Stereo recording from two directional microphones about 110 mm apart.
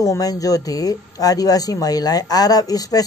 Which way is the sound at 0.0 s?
30° left (ahead or behind).